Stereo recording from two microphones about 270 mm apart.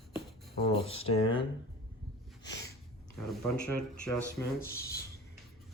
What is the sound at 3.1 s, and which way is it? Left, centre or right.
Speech, centre.